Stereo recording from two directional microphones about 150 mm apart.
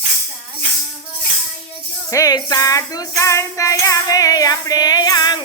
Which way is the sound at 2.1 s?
20° left (ahead or behind).